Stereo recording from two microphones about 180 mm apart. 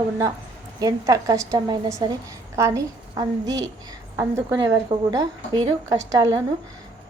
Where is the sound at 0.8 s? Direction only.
20° right (ahead or behind).